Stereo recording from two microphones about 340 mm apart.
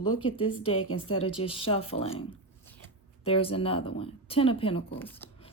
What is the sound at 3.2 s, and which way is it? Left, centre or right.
Speech, centre.